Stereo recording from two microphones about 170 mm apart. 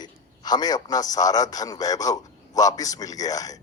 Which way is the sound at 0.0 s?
25° left (ahead or behind).